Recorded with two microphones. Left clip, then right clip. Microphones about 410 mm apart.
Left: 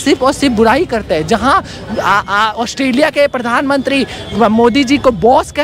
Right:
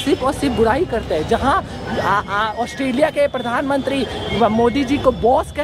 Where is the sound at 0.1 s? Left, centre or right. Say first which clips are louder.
Left 7 dB; left.